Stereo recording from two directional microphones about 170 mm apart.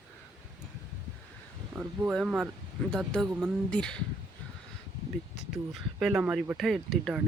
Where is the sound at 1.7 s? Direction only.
10° right (ahead or behind).